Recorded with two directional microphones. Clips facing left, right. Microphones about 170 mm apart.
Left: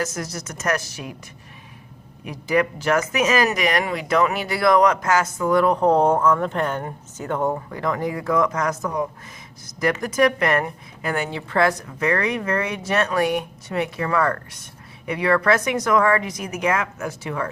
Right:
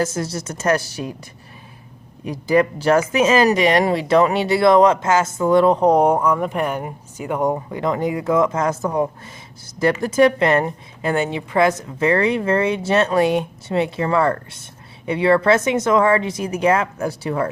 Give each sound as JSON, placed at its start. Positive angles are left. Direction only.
{"t": 0.0, "sound": "a woman's voice", "side_deg": -30}
{"t": 2.2, "sound": "a woman's voice", "side_deg": -35}